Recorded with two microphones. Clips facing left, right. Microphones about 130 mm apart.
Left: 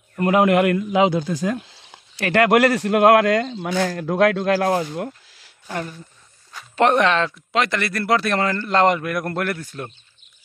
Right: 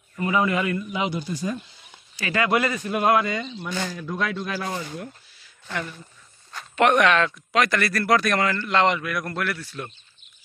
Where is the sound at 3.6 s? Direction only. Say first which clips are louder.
Left 8 dB; 75° left (ahead or behind); by 5.5 s 90° left.